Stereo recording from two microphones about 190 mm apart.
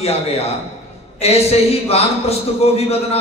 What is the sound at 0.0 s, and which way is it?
A man's voice, 35° left (ahead or behind).